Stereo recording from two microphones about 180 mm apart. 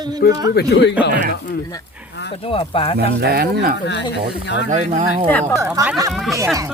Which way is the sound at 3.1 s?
65° right (ahead or behind).